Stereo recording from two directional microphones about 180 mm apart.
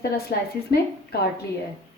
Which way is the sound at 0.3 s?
60° left (ahead or behind).